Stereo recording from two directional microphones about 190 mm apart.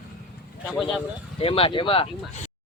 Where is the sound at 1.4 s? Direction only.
30° left (ahead or behind).